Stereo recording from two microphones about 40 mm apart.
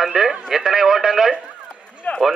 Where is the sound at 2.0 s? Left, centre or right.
Left.